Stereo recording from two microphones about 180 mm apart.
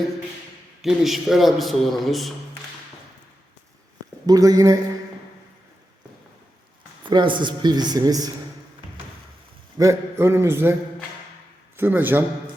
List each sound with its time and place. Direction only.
0.8 s a man's voice: centre (ahead or behind)
4.3 s speech: 20° right (ahead or behind)
7.0 s speech: 25° right (ahead or behind)
9.7 s a man's voice: 15° right (ahead or behind)
11.8 s a man's voice: 10° right (ahead or behind)